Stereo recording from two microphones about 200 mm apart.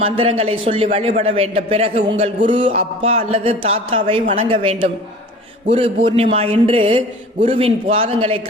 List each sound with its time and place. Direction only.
0.0 s a man's voice: 30° right (ahead or behind)
6.1 s a man's voice: 25° right (ahead or behind)